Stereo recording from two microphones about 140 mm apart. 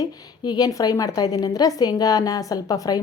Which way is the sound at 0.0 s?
30° left (ahead or behind).